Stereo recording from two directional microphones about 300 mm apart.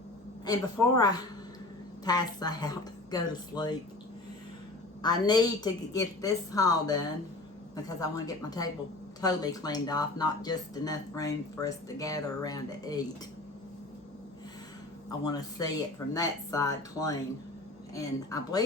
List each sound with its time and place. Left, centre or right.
0.4 s speech: centre
5.0 s speech: centre
15.2 s speech: centre